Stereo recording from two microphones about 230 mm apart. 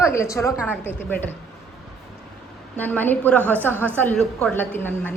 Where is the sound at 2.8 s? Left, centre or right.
Centre.